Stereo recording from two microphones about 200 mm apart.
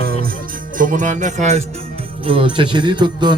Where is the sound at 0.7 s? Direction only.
40° right (ahead or behind).